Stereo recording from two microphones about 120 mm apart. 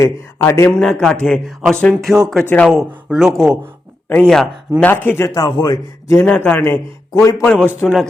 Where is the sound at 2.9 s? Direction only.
5° right (ahead or behind).